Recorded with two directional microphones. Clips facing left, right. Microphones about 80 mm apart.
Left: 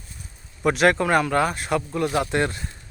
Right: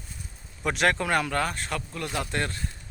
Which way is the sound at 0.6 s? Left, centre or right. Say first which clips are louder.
Left 6 dB; centre.